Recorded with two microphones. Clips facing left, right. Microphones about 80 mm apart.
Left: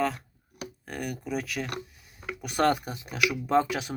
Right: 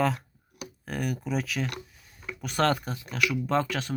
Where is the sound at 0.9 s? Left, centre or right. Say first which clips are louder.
Right 3 dB; centre.